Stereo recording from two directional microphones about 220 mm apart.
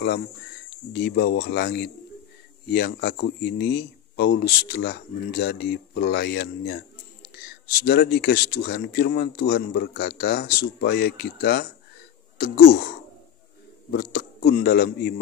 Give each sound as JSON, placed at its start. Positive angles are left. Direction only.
{"t": 0.7, "sound": "speech", "side_deg": 50}
{"t": 7.8, "sound": "speech", "side_deg": 45}
{"t": 13.9, "sound": "speech", "side_deg": 45}